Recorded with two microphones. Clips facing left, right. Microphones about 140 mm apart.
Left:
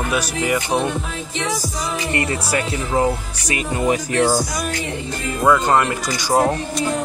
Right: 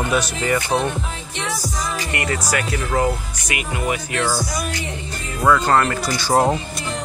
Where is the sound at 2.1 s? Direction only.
30° left (ahead or behind).